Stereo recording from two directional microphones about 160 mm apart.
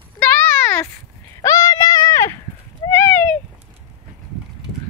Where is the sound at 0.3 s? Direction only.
15° left (ahead or behind).